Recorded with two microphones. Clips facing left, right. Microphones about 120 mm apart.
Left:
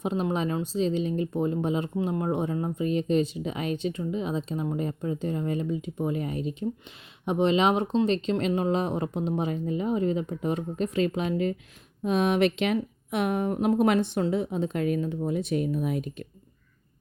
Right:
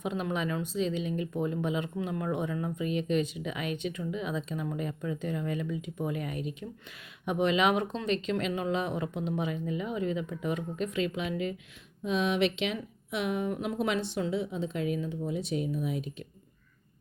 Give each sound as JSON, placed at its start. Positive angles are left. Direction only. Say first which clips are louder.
{"t": 0.0, "sound": "speech", "louder": "left 5 dB", "side_deg": 30}